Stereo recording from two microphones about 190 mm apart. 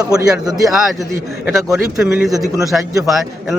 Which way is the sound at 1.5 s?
5° right (ahead or behind).